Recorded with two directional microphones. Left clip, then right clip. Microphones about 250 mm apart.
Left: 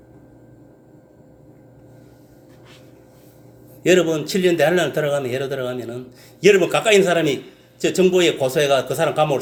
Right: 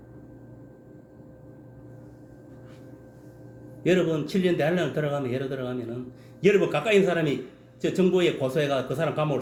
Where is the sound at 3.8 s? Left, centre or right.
Centre.